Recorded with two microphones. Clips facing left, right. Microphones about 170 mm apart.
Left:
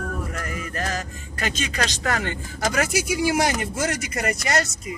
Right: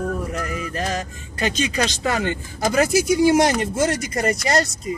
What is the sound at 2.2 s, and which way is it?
Speech, 25° right (ahead or behind).